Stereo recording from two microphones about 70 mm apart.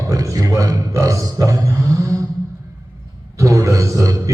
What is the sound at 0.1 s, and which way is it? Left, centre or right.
A man's voice, right.